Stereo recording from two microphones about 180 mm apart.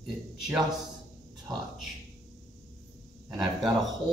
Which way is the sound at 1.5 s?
20° right (ahead or behind).